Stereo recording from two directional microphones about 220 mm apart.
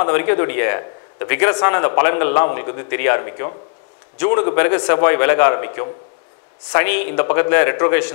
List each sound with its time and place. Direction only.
0.0 s a man's voice: 15° left (ahead or behind)